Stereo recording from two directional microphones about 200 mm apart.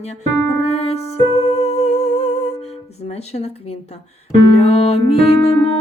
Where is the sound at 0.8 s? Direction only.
30° left (ahead or behind).